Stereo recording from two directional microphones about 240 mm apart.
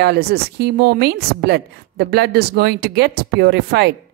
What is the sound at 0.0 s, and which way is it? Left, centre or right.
A woman's voice, right.